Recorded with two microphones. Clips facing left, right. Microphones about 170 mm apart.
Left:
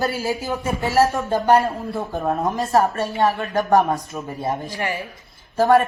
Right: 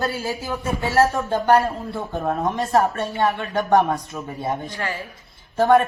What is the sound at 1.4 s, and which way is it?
A woman's voice, 5° left (ahead or behind).